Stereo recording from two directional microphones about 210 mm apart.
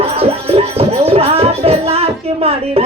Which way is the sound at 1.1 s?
30° right (ahead or behind).